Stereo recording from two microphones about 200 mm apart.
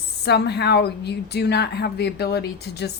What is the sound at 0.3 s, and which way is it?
A woman's voice, 55° left (ahead or behind).